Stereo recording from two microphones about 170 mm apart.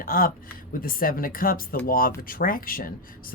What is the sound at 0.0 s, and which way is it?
Speech, 55° left (ahead or behind).